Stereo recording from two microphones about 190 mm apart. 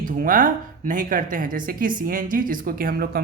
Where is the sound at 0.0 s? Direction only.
45° right (ahead or behind).